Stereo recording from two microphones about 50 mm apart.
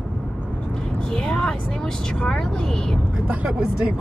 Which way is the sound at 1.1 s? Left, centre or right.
Centre.